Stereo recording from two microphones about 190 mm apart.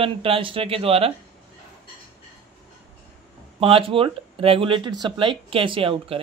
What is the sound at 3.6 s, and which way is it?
Speech, 30° right (ahead or behind).